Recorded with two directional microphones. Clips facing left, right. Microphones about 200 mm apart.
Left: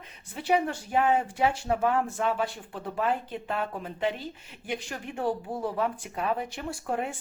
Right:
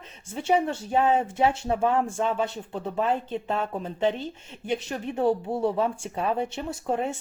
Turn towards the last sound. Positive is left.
turn(degrees=-25)  # may be behind; listen again after turning